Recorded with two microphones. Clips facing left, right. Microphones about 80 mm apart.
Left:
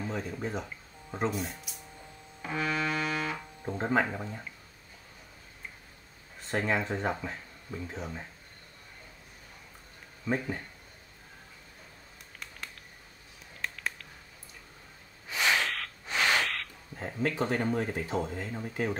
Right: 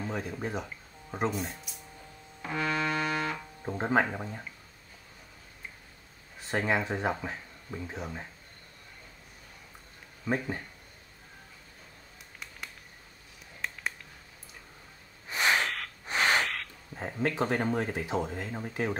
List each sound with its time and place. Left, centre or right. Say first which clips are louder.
0.0 s speech: even; centre
2.4 s music: right 1 dB; centre
3.7 s speech: right 1 dB; centre
6.4 s speech: right 1 dB; centre
10.2 s speech: even; centre
13.6 s finger snapping: even; centre
15.2 s snort: right 1 dB; right
15.6 s snort: even; centre
16.1 s frog: right 1 dB; right
17.4 s speech: right 1 dB; centre